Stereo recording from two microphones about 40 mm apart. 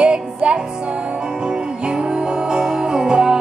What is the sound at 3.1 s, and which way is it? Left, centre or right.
Music, centre.